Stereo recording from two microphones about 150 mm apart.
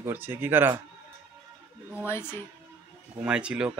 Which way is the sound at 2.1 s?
15° left (ahead or behind).